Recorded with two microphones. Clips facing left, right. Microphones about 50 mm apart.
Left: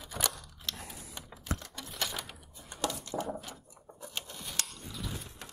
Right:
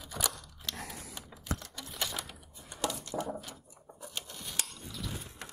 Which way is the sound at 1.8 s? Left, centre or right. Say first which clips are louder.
Even; centre.